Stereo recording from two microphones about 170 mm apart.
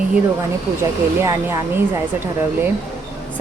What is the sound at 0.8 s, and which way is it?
Speech, 15° right (ahead or behind).